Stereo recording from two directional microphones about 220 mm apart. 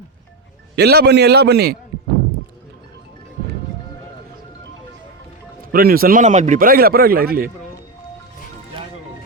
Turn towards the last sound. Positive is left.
turn(degrees=-40)  # may be behind; listen again after turning